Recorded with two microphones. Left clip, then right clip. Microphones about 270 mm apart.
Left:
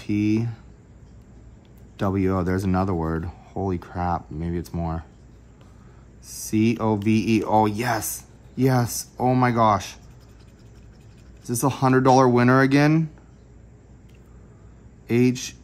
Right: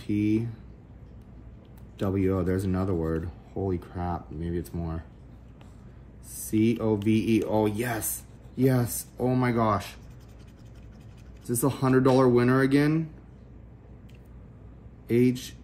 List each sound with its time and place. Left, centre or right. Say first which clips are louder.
0.0 s speech: left 3 dB; left
2.0 s speech: left 3 dB; left
6.3 s speech: left 3 dB; left
11.4 s speech: left 5 dB; centre
15.0 s speech: left 3 dB; left